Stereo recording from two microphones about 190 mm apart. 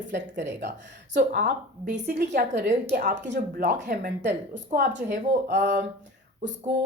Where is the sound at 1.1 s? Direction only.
55° right (ahead or behind).